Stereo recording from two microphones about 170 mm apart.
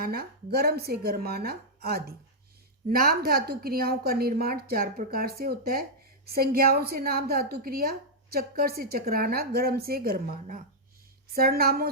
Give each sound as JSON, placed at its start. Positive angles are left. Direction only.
{"t": 0.0, "sound": "a woman's voice", "side_deg": -65}